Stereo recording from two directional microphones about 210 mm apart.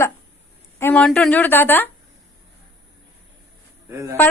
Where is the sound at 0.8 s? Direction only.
10° left (ahead or behind).